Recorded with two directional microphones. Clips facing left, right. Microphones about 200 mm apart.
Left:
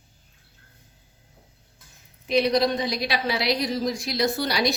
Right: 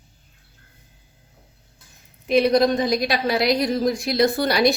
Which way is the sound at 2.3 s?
50° right (ahead or behind).